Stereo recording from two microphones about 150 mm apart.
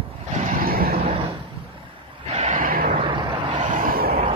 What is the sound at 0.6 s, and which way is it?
Vehicle, 85° right.